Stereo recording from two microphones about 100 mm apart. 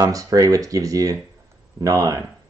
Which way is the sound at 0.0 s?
35° right (ahead or behind).